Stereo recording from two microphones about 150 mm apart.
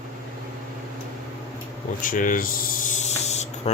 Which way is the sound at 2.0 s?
65° left (ahead or behind).